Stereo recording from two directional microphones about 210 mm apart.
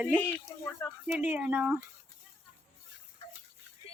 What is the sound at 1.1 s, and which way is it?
Speech, 5° right (ahead or behind).